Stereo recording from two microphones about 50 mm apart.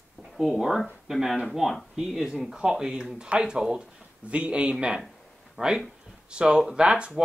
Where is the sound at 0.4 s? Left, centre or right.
Centre.